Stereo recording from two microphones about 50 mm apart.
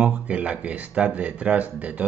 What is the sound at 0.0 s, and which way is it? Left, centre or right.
Speech, right.